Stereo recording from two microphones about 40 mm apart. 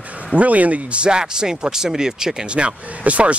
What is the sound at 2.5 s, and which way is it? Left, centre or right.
Speech, right.